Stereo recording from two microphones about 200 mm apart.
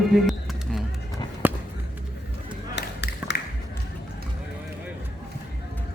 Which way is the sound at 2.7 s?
60° left (ahead or behind).